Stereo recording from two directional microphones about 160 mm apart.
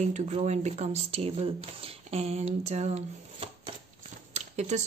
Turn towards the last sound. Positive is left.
turn(degrees=-45)  # may be behind; listen again after turning